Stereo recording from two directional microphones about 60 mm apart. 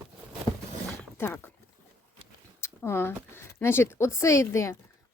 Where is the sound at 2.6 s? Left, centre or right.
Left.